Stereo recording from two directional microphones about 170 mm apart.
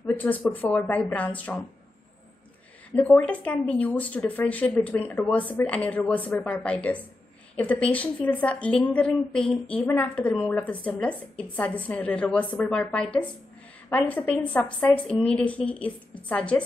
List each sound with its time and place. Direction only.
0.0 s a woman's voice: 10° left (ahead or behind)
3.0 s a woman's voice: 10° left (ahead or behind)